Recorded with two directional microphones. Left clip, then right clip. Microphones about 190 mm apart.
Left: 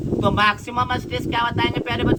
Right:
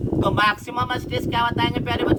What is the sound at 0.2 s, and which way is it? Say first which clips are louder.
A man's voice: left 1 dB; 30° right (ahead or behind).